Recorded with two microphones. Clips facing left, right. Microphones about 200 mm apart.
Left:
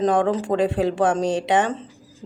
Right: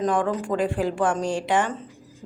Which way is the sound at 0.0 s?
25° left (ahead or behind).